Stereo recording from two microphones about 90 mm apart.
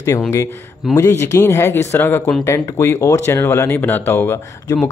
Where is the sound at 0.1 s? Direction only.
35° left (ahead or behind).